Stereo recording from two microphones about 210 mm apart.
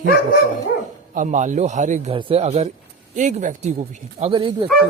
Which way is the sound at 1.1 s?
35° right (ahead or behind).